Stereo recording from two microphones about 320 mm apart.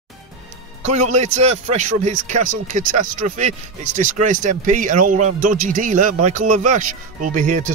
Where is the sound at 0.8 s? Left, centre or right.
Right.